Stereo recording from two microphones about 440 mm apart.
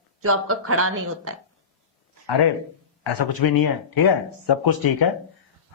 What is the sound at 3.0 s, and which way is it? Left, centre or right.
Speech, left.